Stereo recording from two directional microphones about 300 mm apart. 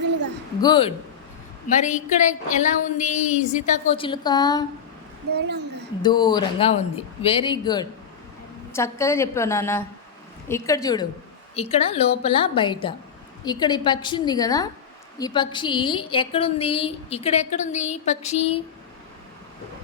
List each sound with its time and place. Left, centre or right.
0.6 s a woman's voice: centre
5.3 s a woman's voice: right
6.0 s a woman's voice: centre